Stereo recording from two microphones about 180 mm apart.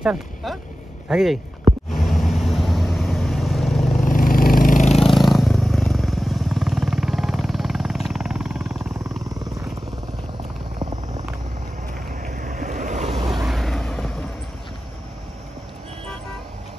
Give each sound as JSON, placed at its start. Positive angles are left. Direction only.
{"t": 0.0, "sound": "speech", "side_deg": -5}
{"t": 1.9, "sound": "vehicle", "side_deg": 0}
{"t": 4.0, "sound": "a sound", "side_deg": 50}
{"t": 4.9, "sound": "vehicle", "side_deg": 0}
{"t": 12.2, "sound": "boat", "side_deg": -45}
{"t": 13.5, "sound": "a sound", "side_deg": 0}